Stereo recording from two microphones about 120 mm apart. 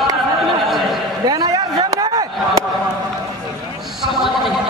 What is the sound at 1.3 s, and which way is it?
Chop, 35° right (ahead or behind).